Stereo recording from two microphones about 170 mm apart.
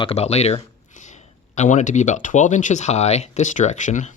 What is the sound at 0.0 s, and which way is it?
Speech, 35° left (ahead or behind).